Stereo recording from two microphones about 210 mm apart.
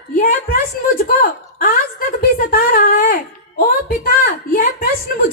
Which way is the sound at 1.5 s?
45° left (ahead or behind).